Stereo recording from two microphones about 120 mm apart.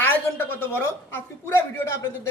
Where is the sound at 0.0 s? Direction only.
20° left (ahead or behind).